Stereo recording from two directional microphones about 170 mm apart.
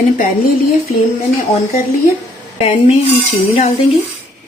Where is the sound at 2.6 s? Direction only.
35° left (ahead or behind).